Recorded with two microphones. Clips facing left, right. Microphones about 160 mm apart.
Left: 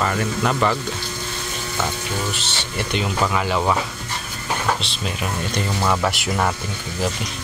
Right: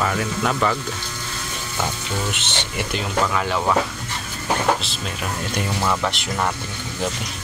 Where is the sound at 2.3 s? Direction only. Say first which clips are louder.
Even; 20° right (ahead or behind).